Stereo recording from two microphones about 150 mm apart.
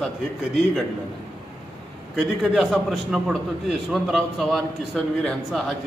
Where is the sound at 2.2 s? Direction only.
Centre (ahead or behind).